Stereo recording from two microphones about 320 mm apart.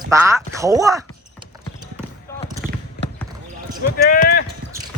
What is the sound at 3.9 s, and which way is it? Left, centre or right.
Speech, left.